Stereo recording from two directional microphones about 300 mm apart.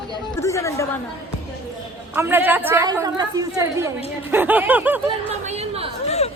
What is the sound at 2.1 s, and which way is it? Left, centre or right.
A woman's voice, centre.